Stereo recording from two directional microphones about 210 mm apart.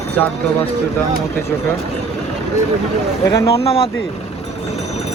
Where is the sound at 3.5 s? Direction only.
30° left (ahead or behind).